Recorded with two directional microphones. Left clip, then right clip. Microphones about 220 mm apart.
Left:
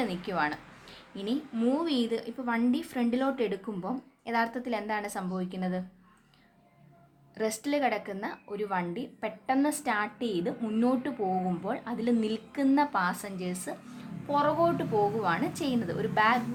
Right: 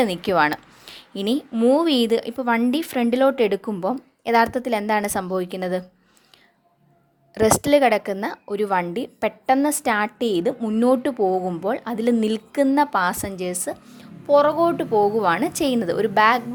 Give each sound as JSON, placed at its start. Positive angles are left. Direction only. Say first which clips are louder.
{"t": 0.0, "sound": "speech", "louder": "right 12 dB", "side_deg": -45}
{"t": 7.3, "sound": "a woman's voice", "louder": "right 14 dB", "side_deg": -45}